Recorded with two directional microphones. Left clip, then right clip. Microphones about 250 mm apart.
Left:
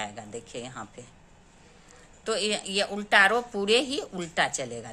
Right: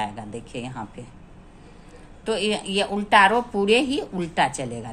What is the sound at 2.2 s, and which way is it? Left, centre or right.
A woman's voice, centre.